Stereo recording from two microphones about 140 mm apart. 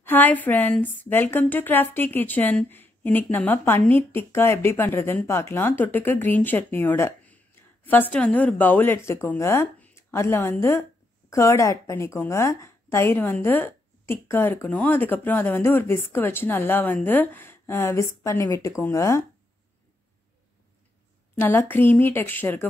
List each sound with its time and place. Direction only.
0.0 s a woman's voice: 15° left (ahead or behind)
21.4 s a woman's voice: 15° left (ahead or behind)